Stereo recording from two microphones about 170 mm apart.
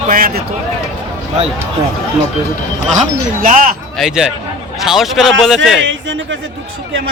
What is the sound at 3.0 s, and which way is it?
Speech, 50° right (ahead or behind).